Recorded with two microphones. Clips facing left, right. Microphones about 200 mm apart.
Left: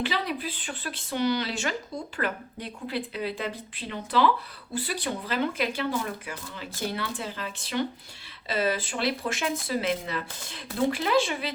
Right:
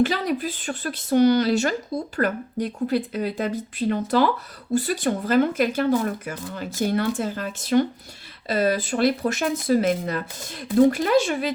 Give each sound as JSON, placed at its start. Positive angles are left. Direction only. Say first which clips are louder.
{"t": 0.0, "sound": "speech", "louder": "right 8 dB", "side_deg": -45}